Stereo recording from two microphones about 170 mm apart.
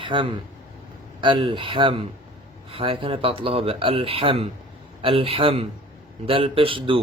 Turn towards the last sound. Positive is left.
turn(degrees=-30)  # may be behind; listen again after turning